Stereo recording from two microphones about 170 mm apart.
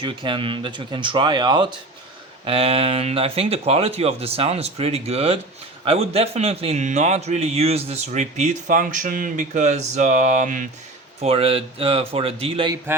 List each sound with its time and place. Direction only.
0.0 s a man's voice: 30° right (ahead or behind); by 10.7 s 50° right (ahead or behind)
11.2 s speech: 35° right (ahead or behind)